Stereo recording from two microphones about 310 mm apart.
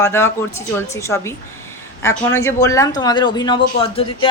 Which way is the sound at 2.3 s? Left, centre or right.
Centre.